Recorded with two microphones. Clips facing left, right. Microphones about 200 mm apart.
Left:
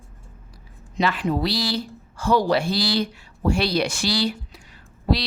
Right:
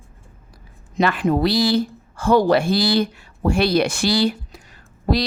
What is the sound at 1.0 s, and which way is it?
A woman's voice, 50° right (ahead or behind).